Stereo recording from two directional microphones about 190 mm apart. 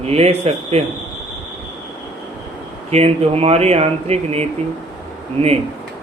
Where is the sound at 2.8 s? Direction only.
35° right (ahead or behind).